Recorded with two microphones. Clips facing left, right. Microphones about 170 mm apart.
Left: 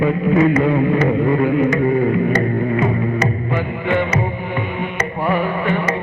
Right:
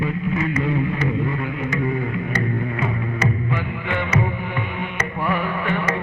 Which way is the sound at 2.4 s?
40° left (ahead or behind).